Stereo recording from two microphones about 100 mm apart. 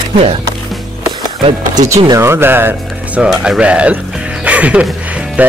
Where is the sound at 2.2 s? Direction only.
25° right (ahead or behind).